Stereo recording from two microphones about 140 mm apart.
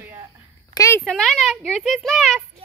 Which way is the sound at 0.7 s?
20° left (ahead or behind).